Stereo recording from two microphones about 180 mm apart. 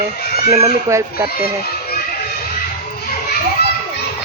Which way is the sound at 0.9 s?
10° right (ahead or behind).